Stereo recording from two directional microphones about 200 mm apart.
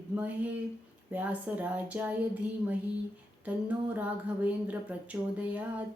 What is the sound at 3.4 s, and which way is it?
Speech, 5° right (ahead or behind).